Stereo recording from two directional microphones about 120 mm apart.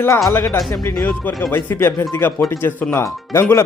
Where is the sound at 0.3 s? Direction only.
25° left (ahead or behind).